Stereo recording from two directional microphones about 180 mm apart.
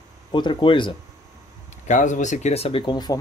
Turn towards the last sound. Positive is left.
turn(degrees=25)  # may be behind; listen again after turning